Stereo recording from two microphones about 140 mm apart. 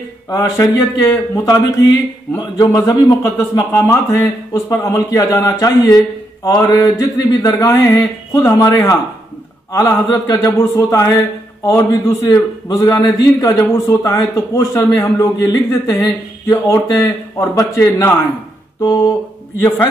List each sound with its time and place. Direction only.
0.3 s a man's voice: 25° left (ahead or behind)